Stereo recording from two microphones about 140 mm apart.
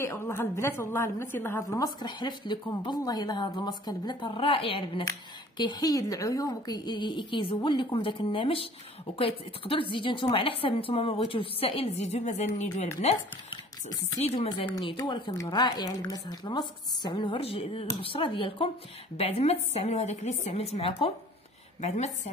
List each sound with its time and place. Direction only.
0.0 s a woman's voice: 20° left (ahead or behind)
2.0 s a woman's voice: 30° left (ahead or behind)
5.6 s a woman's voice: 30° left (ahead or behind); by 13.1 s 50° left (ahead or behind)
13.5 s speech: 25° left (ahead or behind)
14.2 s a woman's voice: 45° left (ahead or behind)
15.0 s a woman's voice: 35° left (ahead or behind)
19.1 s a woman's voice: 50° left (ahead or behind)